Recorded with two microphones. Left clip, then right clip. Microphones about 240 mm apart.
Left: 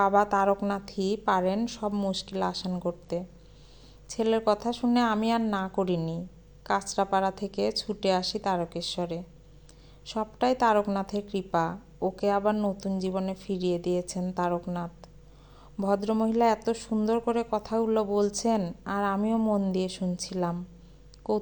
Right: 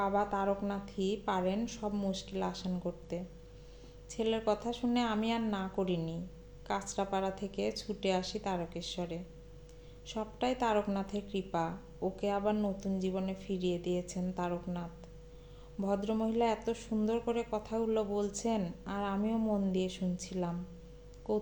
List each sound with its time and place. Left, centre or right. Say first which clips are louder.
0.0 s a woman's voice: left 9 dB; left